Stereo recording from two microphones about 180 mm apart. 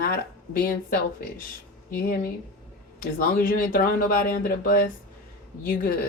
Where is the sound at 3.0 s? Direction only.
50° left (ahead or behind).